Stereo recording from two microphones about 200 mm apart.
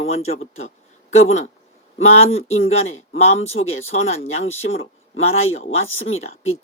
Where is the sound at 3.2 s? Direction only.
30° left (ahead or behind).